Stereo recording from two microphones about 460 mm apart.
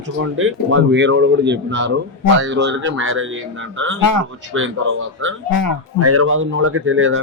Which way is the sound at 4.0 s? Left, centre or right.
Left.